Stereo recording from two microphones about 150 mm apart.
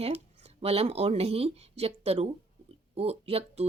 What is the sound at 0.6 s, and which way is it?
Speech, 40° right (ahead or behind).